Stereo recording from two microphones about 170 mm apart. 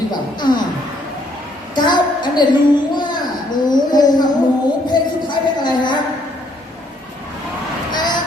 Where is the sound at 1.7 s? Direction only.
25° left (ahead or behind).